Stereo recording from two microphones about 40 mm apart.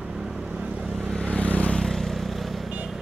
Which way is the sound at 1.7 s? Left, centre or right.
Centre.